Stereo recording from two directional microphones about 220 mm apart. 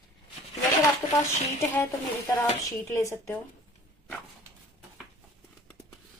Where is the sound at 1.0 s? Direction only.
20° left (ahead or behind).